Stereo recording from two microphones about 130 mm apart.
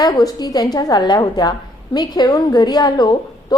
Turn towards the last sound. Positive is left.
turn(degrees=35)  # may be behind; listen again after turning